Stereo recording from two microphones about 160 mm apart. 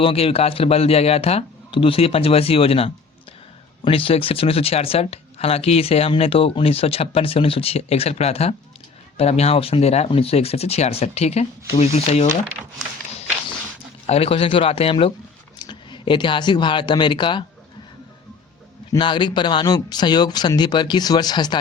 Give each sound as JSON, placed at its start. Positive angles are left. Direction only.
{"t": 0.0, "sound": "speech", "side_deg": 35}
{"t": 14.1, "sound": "speech", "side_deg": 35}
{"t": 18.9, "sound": "speech", "side_deg": 30}